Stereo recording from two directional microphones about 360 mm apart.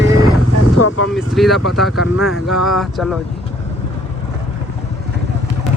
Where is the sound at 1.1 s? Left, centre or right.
Centre.